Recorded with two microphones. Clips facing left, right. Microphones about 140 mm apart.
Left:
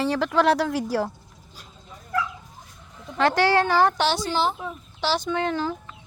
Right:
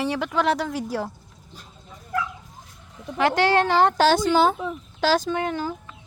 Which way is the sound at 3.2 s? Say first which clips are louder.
Even; 15° right (ahead or behind).